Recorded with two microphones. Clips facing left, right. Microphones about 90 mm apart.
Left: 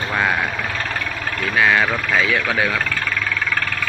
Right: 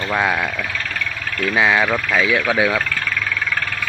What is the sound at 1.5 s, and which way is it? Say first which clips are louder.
Speech: even; 15° right (ahead or behind).